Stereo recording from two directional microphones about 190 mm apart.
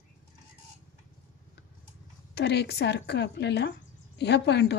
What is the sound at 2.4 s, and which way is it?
Speech, 60° left (ahead or behind).